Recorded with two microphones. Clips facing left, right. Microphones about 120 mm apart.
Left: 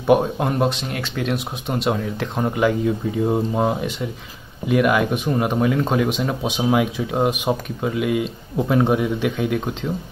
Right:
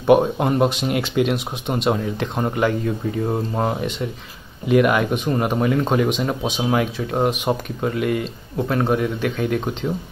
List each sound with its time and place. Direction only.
0.0 s speech: centre (ahead or behind)
0.8 s speech: 20° right (ahead or behind)
1.9 s speech: centre (ahead or behind)